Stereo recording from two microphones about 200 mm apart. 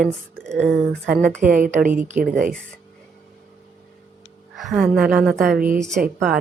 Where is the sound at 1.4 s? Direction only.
40° right (ahead or behind).